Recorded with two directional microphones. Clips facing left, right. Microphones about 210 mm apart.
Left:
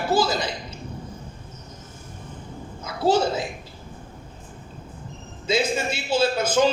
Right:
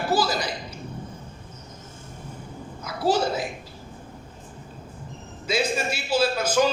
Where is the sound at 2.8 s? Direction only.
25° left (ahead or behind).